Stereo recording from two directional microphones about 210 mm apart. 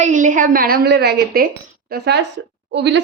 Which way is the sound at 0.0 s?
35° right (ahead or behind).